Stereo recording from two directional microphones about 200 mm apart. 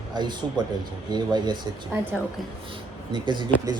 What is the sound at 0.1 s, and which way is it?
Speech, 20° right (ahead or behind).